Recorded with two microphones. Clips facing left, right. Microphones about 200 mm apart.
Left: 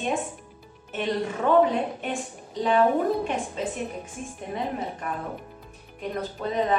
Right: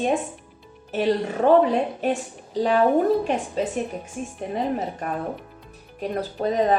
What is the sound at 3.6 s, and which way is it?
A woman's voice, 35° right (ahead or behind).